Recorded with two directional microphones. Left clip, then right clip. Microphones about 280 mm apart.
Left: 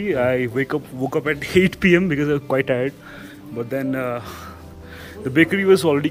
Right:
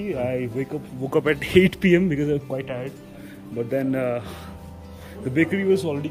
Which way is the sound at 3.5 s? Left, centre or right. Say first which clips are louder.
Even; centre.